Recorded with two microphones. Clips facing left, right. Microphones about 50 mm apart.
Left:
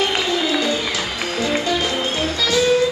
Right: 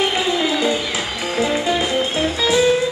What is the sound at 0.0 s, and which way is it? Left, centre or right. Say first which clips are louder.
Music: right 1 dB; centre.